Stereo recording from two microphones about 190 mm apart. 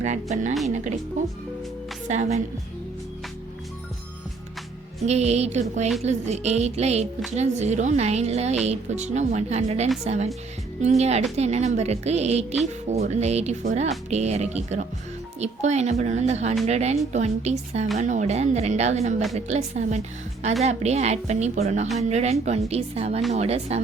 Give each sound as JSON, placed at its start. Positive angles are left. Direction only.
{"t": 0.0, "sound": "speech", "side_deg": -40}
{"t": 2.0, "sound": "speech", "side_deg": -40}
{"t": 5.0, "sound": "speech", "side_deg": -35}